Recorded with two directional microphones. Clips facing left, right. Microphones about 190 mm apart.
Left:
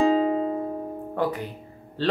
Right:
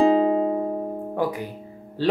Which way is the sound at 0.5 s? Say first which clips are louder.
Right 4 dB; 40° right (ahead or behind).